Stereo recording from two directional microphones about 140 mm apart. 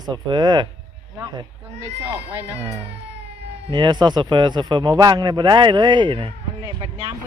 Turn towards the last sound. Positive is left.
turn(degrees=-35)  # may be behind; listen again after turning